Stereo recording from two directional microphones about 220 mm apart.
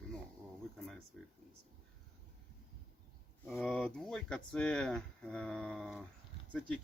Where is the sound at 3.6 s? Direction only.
Centre (ahead or behind).